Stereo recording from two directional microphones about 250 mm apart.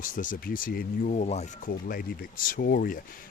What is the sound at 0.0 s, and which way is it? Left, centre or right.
Speech, left.